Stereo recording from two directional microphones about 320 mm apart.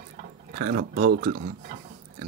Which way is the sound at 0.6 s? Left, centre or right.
Right.